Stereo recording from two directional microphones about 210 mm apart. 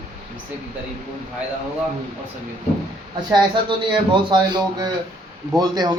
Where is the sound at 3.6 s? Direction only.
20° right (ahead or behind).